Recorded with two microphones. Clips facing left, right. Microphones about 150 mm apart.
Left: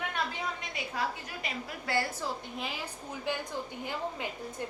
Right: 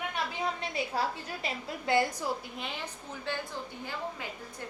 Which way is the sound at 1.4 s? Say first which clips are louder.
Right 4 dB; 20° right (ahead or behind).